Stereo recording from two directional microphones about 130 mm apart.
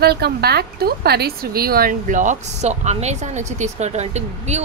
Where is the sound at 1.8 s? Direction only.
80° right.